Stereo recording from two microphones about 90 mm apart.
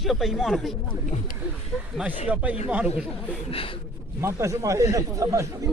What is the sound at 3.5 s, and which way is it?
Speech, 90° left.